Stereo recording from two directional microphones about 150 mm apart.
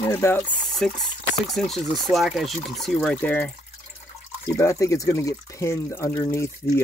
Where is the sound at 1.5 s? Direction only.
Centre (ahead or behind).